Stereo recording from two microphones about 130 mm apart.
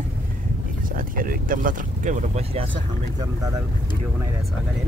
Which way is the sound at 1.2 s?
90° right.